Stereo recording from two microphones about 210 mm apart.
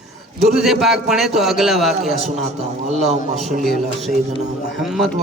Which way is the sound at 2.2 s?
30° right (ahead or behind).